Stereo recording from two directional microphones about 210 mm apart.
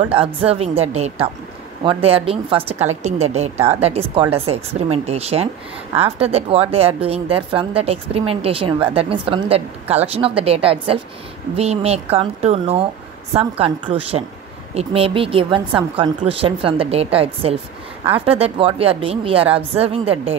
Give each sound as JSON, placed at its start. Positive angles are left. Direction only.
{"t": 0.0, "sound": "a woman's voice", "side_deg": -25}